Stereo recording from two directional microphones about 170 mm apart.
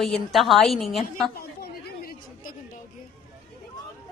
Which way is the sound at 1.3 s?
65° left (ahead or behind).